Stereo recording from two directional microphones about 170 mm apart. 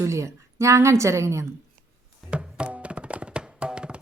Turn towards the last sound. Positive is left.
turn(degrees=-5)  # may be behind; listen again after turning